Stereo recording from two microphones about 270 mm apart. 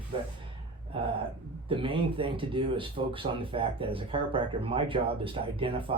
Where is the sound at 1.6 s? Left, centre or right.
Centre.